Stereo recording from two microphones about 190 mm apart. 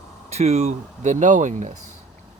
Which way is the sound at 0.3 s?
35° right (ahead or behind).